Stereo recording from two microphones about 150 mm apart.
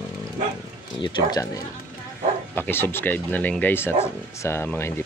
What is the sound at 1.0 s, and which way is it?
Speech, 30° left (ahead or behind).